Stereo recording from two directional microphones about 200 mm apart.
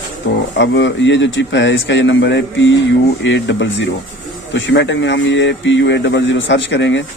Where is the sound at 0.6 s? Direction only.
65° left (ahead or behind).